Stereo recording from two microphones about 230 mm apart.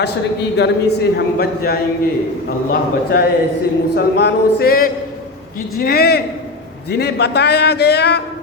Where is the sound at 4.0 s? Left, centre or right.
Left.